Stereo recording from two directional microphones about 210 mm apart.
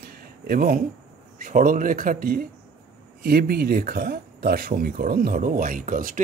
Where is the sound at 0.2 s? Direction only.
45° right (ahead or behind).